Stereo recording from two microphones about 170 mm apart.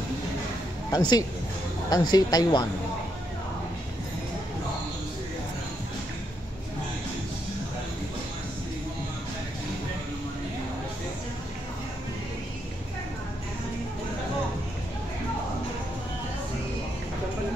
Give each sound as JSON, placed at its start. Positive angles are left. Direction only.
{"t": 0.9, "sound": "a woman's voice", "side_deg": 25}